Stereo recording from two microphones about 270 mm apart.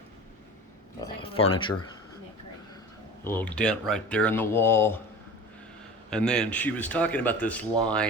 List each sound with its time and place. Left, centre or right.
1.0 s speech: centre
3.2 s speech: centre
6.1 s speech: centre